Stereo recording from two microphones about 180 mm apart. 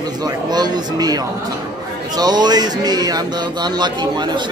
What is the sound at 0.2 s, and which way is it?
Speech, 20° right (ahead or behind).